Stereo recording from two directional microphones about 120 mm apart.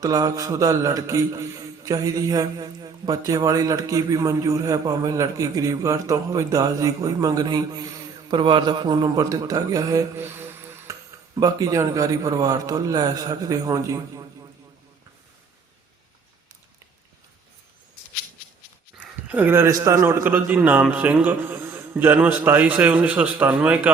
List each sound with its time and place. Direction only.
0.0 s a man's voice: 30° right (ahead or behind)
11.3 s a man's voice: 30° right (ahead or behind)
18.9 s a man's voice: 15° right (ahead or behind)